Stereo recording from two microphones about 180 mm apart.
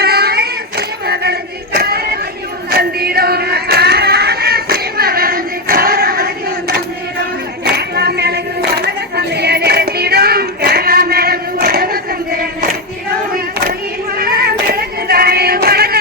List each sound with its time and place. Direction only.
0.0 s a sound: 60° right (ahead or behind)
2.6 s music: 60° right (ahead or behind)
7.6 s singing: 65° right (ahead or behind)
14.2 s female singing: 55° right (ahead or behind)